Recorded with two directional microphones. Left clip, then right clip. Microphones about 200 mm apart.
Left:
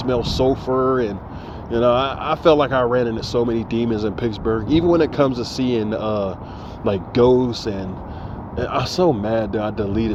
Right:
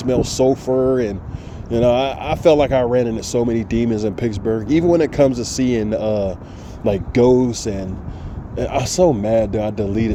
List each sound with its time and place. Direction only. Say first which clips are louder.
0.0 s speech: right 2 dB; 55° right (ahead or behind)